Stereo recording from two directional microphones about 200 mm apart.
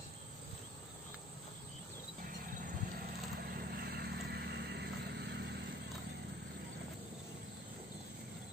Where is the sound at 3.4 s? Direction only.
50° right (ahead or behind).